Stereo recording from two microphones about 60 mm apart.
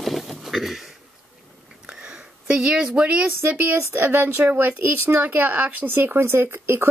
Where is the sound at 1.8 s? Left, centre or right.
Centre.